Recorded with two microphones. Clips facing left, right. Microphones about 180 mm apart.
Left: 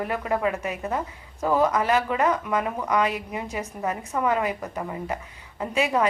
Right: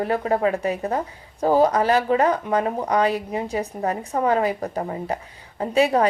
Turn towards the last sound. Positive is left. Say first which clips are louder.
# right 5 dB
turn(degrees=-35)  # may be behind; listen again after turning